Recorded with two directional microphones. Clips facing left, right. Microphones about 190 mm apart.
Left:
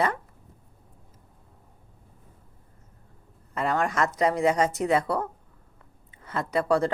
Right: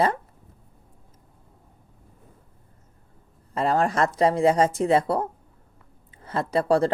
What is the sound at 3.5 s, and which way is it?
Speech, 30° right (ahead or behind).